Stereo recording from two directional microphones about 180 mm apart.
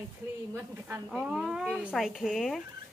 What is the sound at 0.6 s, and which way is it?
Speech, 10° right (ahead or behind).